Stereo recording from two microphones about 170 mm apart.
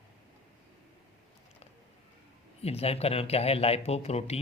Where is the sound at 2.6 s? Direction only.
35° left (ahead or behind).